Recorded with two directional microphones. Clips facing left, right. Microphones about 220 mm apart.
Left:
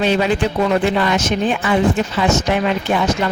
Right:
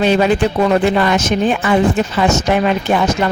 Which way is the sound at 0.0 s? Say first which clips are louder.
Right 3 dB; 50° right (ahead or behind).